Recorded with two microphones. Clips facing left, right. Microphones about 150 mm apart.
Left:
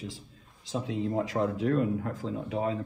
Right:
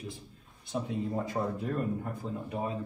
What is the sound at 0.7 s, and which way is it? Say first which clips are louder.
Speech: left 2 dB; 90° left.